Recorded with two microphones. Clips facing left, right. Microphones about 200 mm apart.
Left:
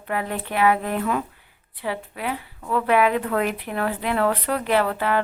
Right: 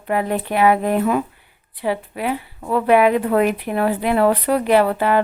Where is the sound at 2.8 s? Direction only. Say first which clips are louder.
Right 6 dB; 15° right (ahead or behind).